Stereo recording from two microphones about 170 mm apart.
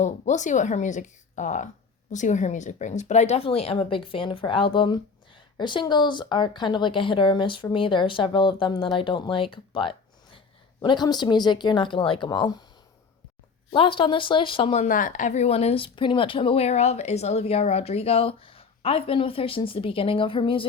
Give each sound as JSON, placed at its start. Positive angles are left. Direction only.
{"t": 0.0, "sound": "a woman's voice", "side_deg": 45}
{"t": 13.7, "sound": "speech", "side_deg": 30}
{"t": 14.8, "sound": "speech", "side_deg": 50}